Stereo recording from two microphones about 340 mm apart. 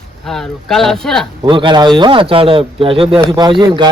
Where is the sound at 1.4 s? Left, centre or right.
Centre.